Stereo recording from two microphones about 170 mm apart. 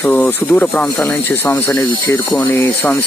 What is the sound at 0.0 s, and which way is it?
Speech, 10° left (ahead or behind).